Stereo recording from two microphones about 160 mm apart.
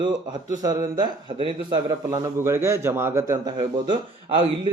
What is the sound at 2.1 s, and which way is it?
A man's voice, 20° right (ahead or behind).